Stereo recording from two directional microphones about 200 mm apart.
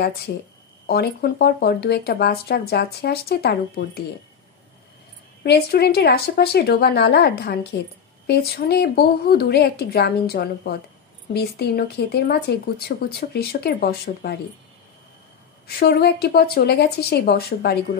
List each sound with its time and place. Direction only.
0.8 s speech: 50° left (ahead or behind)
5.4 s a woman's voice: 55° left (ahead or behind)
15.6 s speech: 50° left (ahead or behind)